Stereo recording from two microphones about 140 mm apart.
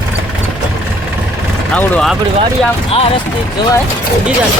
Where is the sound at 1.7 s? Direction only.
5° left (ahead or behind).